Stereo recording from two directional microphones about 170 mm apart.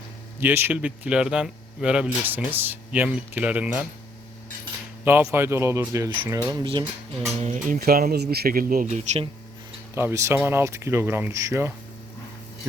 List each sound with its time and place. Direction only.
0.3 s speech: 15° right (ahead or behind)
5.0 s speech: 10° right (ahead or behind)
7.4 s speech: 50° right (ahead or behind)
7.8 s speech: 65° right (ahead or behind)
8.9 s speech: 40° right (ahead or behind)
9.9 s speech: 15° right (ahead or behind)